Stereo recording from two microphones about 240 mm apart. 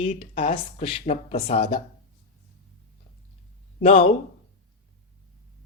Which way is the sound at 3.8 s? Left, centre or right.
Left.